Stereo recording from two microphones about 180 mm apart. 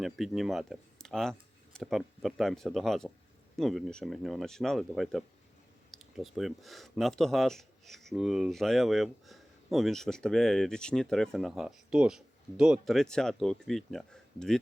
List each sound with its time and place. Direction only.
0.0 s speech: centre (ahead or behind)